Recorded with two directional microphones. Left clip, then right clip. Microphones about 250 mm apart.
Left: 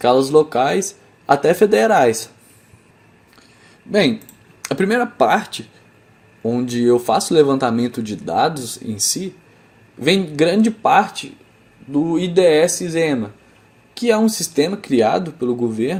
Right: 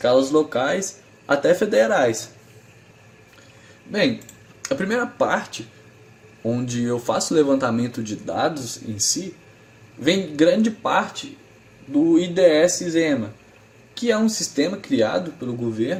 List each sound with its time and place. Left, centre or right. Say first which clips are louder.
0.0 s speech: left 4 dB; left
4.6 s speech: left 5 dB; left